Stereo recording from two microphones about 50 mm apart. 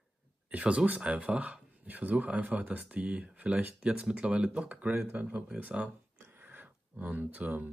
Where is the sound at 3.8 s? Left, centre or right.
Centre.